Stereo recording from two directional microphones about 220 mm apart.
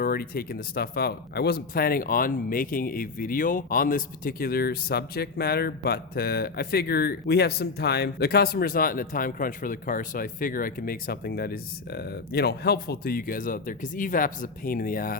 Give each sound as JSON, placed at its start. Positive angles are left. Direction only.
{"t": 0.0, "sound": "speech", "side_deg": 45}